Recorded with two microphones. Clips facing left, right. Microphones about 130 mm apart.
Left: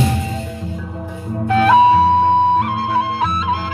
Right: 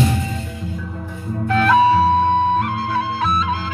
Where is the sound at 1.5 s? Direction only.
25° left (ahead or behind).